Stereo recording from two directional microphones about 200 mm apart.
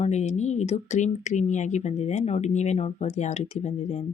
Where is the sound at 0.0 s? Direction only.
35° left (ahead or behind).